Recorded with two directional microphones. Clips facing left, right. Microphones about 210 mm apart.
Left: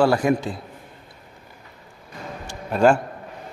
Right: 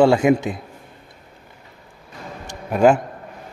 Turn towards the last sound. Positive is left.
turn(degrees=-15)  # may be behind; listen again after turning